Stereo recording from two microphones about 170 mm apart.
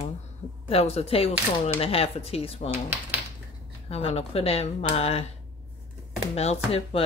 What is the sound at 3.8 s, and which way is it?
Speech, 35° left (ahead or behind).